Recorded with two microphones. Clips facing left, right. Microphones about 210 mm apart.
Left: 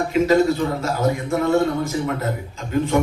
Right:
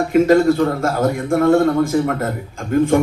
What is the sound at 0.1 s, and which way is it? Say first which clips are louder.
A man's voice: right 4 dB; 50° right (ahead or behind).